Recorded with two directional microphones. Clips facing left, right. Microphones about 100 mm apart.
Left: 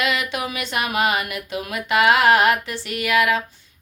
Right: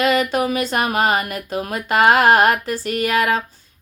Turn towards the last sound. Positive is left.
turn(degrees=-40)  # may be behind; listen again after turning